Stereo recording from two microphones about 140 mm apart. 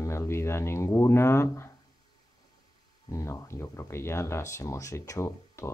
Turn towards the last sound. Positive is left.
turn(degrees=20)  # may be behind; listen again after turning